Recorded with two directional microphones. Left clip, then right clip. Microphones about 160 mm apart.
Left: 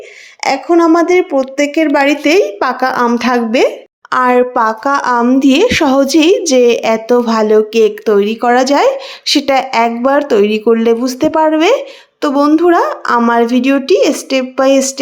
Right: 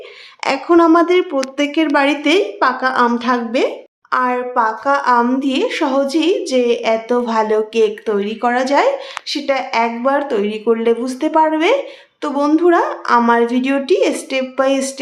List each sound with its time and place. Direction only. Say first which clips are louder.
0.4 s a woman's voice: left 2 dB; 20° left (ahead or behind); by 3.7 s 45° left (ahead or behind)
4.1 s a woman's voice: left 6 dB; 55° left (ahead or behind); by 8.9 s 40° left (ahead or behind)
9.2 s a woman's voice: left 8 dB; 55° left (ahead or behind); by 14.9 s 30° left (ahead or behind)